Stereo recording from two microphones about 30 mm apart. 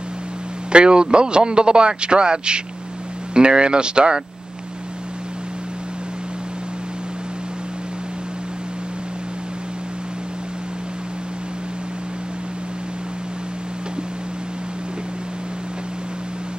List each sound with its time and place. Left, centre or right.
0.7 s a man's voice: right